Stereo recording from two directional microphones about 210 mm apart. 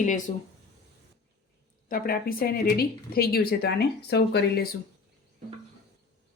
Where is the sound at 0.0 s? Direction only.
40° left (ahead or behind).